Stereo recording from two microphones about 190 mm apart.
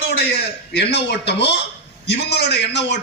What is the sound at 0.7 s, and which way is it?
A man's voice, 60° left (ahead or behind).